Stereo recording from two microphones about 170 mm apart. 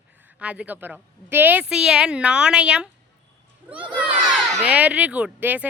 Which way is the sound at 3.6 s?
10° right (ahead or behind).